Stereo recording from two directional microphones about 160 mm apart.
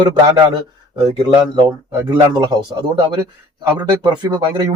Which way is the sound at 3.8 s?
25° right (ahead or behind).